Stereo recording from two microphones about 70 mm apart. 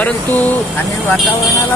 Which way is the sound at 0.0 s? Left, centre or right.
Left.